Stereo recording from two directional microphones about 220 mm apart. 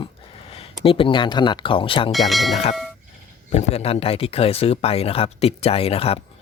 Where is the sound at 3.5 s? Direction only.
30° left (ahead or behind).